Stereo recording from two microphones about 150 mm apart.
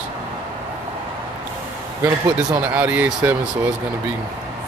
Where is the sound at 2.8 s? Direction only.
10° right (ahead or behind).